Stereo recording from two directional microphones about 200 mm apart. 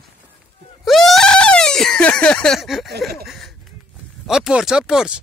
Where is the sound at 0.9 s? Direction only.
Centre (ahead or behind).